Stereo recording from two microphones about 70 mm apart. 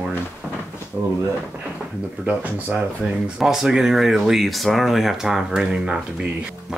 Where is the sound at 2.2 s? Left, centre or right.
Right.